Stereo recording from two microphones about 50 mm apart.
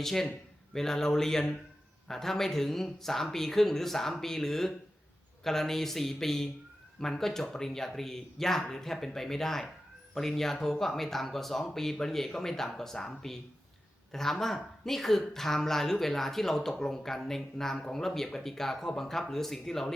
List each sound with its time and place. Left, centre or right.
0.0 s speech: centre